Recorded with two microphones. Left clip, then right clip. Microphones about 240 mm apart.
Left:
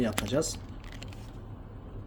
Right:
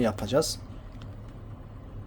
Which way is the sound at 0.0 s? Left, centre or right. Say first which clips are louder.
Right 4 dB; right.